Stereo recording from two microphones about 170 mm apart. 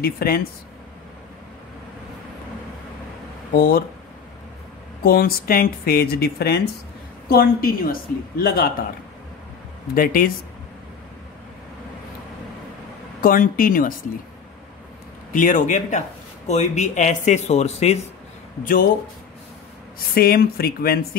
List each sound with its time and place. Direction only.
0.0 s speech: 65° left (ahead or behind)
3.5 s speech: 60° left (ahead or behind)
5.0 s speech: 60° left (ahead or behind)
9.9 s speech: 55° left (ahead or behind)
13.2 s speech: 55° left (ahead or behind)
15.3 s speech: 50° left (ahead or behind)
18.6 s speech: 55° left (ahead or behind)
20.2 s speech: 60° left (ahead or behind)